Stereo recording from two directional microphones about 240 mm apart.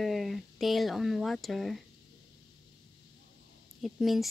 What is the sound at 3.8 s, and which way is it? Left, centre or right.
Speech, centre.